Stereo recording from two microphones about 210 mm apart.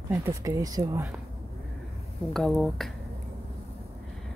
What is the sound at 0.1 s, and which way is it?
Speech, 10° right (ahead or behind).